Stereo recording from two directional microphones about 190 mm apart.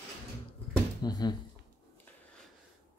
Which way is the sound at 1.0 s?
20° left (ahead or behind).